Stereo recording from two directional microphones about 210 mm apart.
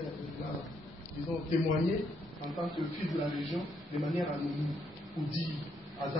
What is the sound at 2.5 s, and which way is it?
A man's voice, centre (ahead or behind).